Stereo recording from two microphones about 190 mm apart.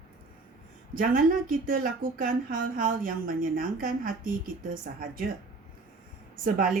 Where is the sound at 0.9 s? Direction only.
50° right (ahead or behind).